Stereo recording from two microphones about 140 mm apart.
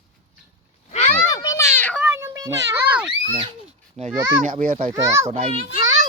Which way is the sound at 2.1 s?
25° right (ahead or behind).